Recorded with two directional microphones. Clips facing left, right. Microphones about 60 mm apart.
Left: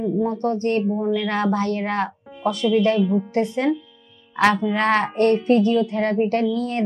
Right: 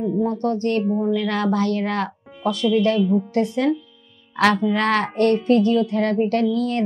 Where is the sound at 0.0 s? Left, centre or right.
Left.